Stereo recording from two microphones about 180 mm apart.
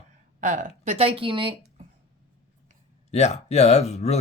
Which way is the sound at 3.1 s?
40° left (ahead or behind).